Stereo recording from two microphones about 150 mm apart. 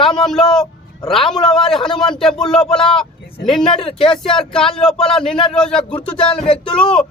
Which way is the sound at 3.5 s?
40° left (ahead or behind).